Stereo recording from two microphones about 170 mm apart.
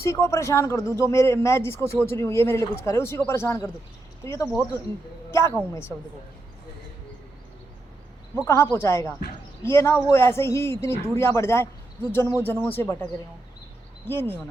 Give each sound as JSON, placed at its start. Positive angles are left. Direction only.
{"t": 0.0, "sound": "speech", "side_deg": 15}
{"t": 8.4, "sound": "speech", "side_deg": 15}
{"t": 14.1, "sound": "speech", "side_deg": 15}